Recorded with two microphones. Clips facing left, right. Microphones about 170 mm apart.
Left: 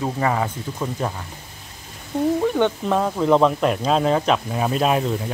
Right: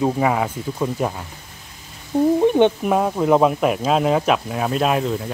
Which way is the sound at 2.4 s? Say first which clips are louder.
Right 5 dB; 20° right (ahead or behind).